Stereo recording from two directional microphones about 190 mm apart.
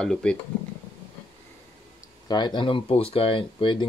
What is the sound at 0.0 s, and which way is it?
Speech, 5° left (ahead or behind).